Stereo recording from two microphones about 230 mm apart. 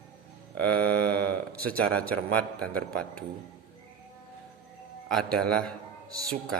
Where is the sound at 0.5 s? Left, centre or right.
Centre.